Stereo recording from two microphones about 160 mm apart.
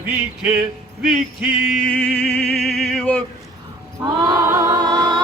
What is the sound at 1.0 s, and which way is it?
Music, 5° right (ahead or behind).